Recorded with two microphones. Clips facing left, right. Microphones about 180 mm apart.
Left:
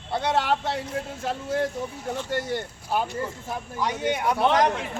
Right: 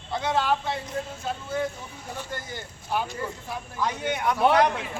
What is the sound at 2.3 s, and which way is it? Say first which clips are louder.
Speech: left 12 dB; 70° left (ahead or behind).